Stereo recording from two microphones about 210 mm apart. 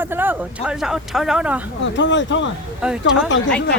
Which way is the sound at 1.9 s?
60° left (ahead or behind).